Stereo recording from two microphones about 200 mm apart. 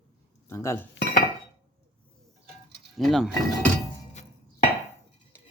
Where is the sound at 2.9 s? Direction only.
Centre (ahead or behind).